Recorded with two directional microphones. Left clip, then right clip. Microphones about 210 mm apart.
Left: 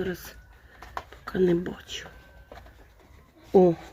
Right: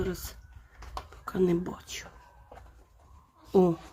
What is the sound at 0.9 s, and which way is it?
Whispering, 5° right (ahead or behind).